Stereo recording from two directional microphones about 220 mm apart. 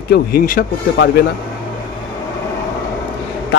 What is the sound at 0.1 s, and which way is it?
A man's voice, 45° left (ahead or behind).